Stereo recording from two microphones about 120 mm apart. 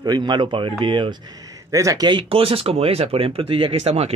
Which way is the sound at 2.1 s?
45° right (ahead or behind).